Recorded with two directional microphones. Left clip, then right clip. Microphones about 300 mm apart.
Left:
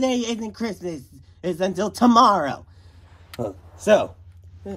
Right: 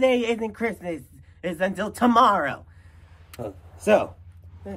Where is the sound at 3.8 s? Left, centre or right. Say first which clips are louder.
Left 2 dB; centre.